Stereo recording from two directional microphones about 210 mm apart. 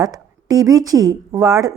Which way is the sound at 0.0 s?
15° right (ahead or behind).